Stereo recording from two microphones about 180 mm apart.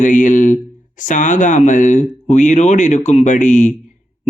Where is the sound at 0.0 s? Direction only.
45° left (ahead or behind).